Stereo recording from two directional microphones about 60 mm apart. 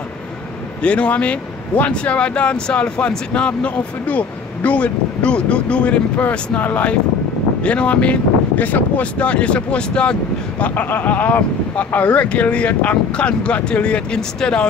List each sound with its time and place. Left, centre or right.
0.8 s speech: left
10.6 s speech: left; by 14.7 s centre